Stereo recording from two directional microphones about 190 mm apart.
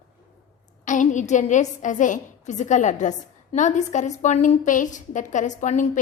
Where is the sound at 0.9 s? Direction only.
40° left (ahead or behind).